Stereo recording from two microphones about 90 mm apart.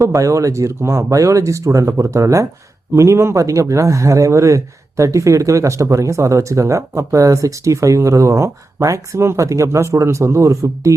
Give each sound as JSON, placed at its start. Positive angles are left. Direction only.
{"t": 0.0, "sound": "speech", "side_deg": -40}